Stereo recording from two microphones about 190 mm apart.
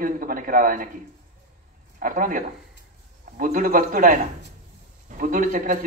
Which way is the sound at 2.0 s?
45° right (ahead or behind).